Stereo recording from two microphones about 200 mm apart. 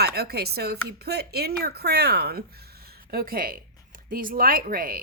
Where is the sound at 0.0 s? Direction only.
50° right (ahead or behind).